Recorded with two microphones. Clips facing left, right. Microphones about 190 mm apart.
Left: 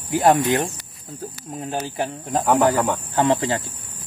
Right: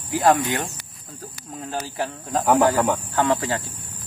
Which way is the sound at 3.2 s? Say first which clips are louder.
Left 4 dB; 20° left (ahead or behind).